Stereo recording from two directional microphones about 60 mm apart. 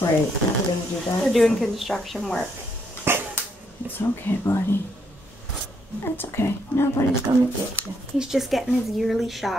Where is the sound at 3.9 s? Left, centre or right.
Left.